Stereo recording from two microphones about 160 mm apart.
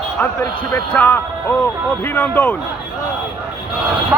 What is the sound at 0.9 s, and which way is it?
A man's voice, 10° left (ahead or behind).